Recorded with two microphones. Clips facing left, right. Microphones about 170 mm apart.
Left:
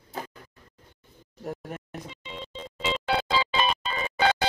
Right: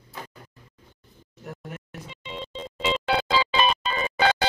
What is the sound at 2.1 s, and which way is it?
Music, 90° right.